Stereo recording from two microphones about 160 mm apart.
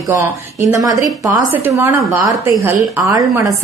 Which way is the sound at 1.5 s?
15° right (ahead or behind).